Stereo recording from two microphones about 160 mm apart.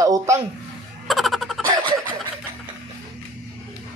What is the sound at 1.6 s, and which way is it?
Snicker, 30° right (ahead or behind).